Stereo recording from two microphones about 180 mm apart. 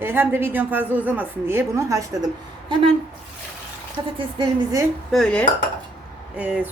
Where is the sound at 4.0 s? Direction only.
20° right (ahead or behind).